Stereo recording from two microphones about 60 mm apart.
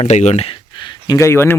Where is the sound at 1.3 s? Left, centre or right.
Left.